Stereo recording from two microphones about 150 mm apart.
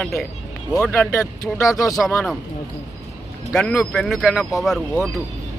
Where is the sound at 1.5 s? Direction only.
20° left (ahead or behind).